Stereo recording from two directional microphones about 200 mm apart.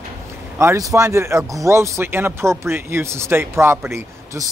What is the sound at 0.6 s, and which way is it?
Speech, 15° right (ahead or behind).